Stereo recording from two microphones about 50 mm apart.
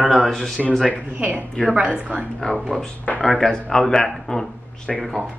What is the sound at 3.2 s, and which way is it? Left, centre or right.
Speech, centre.